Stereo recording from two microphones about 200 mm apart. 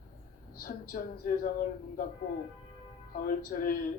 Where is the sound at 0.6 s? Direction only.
45° left (ahead or behind).